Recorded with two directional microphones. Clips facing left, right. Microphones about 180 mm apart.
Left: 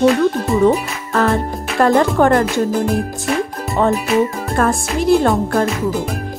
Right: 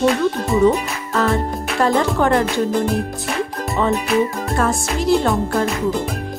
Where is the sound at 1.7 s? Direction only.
50° left (ahead or behind).